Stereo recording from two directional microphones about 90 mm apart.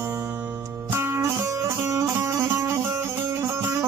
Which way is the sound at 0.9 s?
30° right (ahead or behind).